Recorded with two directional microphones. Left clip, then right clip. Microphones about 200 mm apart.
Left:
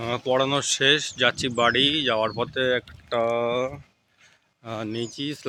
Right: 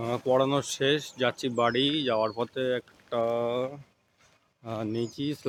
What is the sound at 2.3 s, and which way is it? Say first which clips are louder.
Speech: left 5 dB; 15° left (ahead or behind).